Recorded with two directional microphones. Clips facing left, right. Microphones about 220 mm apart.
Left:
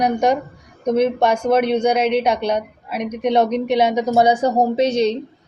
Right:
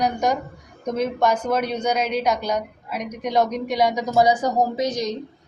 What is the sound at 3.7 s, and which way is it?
A woman's voice, 25° left (ahead or behind).